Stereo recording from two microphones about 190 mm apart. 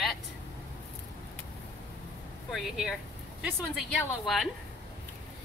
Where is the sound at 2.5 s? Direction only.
Centre (ahead or behind).